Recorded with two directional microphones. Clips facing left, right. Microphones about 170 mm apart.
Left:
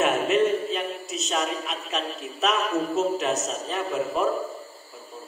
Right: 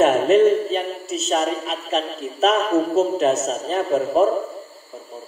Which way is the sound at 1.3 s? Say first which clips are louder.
Right 6 dB; 35° right (ahead or behind).